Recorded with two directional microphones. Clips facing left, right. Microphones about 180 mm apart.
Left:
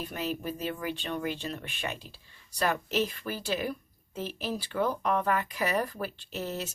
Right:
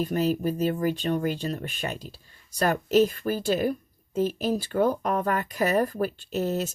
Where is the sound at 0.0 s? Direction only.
40° right (ahead or behind).